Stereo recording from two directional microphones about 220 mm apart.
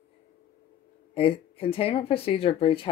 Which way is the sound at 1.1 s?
25° left (ahead or behind).